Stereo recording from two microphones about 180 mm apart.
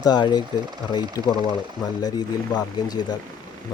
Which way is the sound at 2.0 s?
20° left (ahead or behind).